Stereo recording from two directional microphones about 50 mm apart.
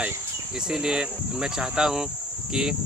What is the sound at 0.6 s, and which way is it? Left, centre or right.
Speech, centre.